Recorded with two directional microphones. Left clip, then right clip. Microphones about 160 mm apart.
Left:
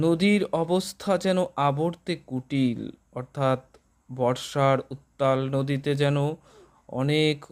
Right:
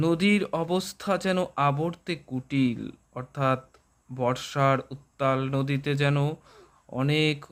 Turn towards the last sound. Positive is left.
turn(degrees=20)  # may be behind; listen again after turning